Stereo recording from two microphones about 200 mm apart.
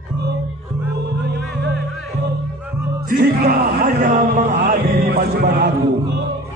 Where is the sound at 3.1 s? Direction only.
50° right (ahead or behind).